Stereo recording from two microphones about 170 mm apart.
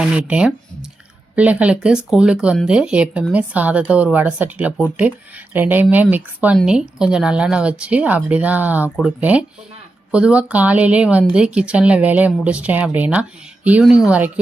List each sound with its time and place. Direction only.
0.0 s speech: 5° right (ahead or behind)